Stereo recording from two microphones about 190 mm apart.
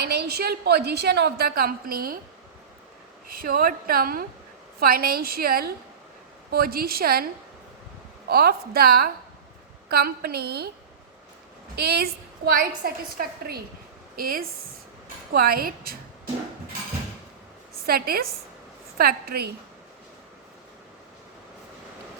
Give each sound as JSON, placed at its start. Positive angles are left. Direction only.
{"t": 0.0, "sound": "a woman's voice", "side_deg": -60}
{"t": 3.2, "sound": "a woman's voice", "side_deg": -50}
{"t": 8.3, "sound": "a woman's voice", "side_deg": -55}
{"t": 11.8, "sound": "a woman's voice", "side_deg": -55}
{"t": 17.8, "sound": "a woman's voice", "side_deg": -55}